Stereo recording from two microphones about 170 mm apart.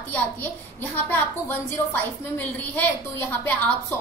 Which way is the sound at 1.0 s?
10° left (ahead or behind).